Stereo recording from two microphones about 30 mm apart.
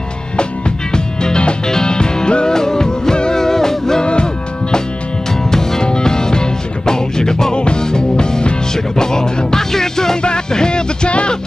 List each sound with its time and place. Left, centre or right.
0.4 s music: left
4.0 s music: left
5.5 s music: centre
7.5 s music: left
7.8 s music: left
10.2 s music: left